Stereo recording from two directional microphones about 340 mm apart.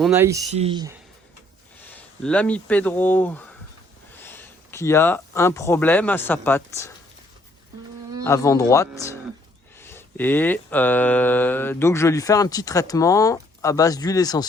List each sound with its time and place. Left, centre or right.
0.0 s speech: centre
1.9 s speech: centre
8.2 s mantra: centre